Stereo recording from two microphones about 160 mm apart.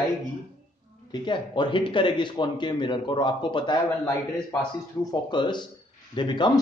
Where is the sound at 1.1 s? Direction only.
30° left (ahead or behind).